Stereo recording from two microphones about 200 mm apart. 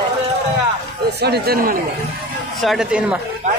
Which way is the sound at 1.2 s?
50° right (ahead or behind).